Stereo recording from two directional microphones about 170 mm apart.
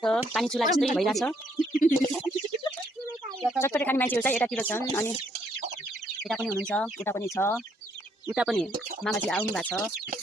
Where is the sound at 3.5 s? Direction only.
15° left (ahead or behind).